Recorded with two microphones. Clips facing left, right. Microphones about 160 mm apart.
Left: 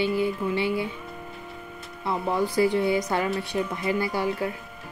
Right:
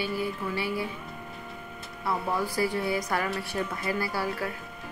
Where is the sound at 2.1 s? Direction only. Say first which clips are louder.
Left 3 dB; 25° left (ahead or behind).